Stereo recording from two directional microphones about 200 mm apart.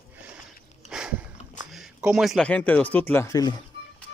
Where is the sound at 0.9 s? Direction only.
5° right (ahead or behind).